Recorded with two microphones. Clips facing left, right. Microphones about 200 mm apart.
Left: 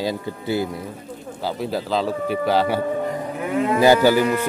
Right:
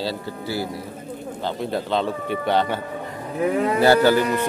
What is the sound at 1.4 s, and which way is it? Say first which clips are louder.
Speech: left 1 dB; 5° left (ahead or behind).